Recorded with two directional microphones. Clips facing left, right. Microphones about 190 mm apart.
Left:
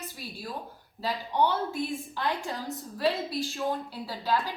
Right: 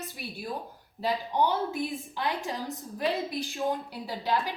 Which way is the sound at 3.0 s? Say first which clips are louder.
Left 1 dB; 15° right (ahead or behind).